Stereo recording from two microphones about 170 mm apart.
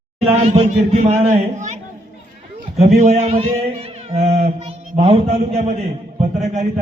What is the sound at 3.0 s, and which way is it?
A man's voice, 40° right (ahead or behind).